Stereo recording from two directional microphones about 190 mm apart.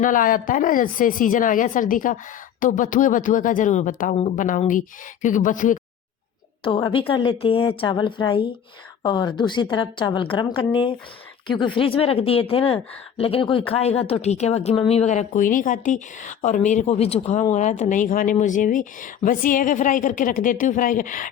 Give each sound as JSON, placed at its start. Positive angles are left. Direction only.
{"t": 0.0, "sound": "speech", "side_deg": 45}
{"t": 6.7, "sound": "a woman's voice", "side_deg": 25}